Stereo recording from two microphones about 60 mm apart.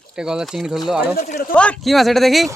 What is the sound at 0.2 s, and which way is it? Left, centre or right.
Speech, centre.